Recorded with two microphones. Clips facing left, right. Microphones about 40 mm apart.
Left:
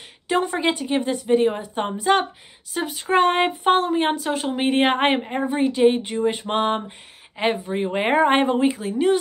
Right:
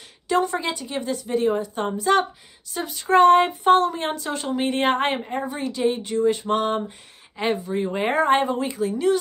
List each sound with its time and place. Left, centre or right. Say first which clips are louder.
0.3 s speech: left 1 dB; left
6.9 s speech: left 3 dB; centre